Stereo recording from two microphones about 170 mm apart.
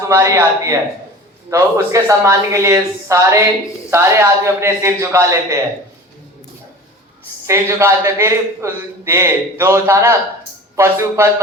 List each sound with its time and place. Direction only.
0.1 s a man's voice: 15° right (ahead or behind)
7.4 s a man's voice: 15° right (ahead or behind)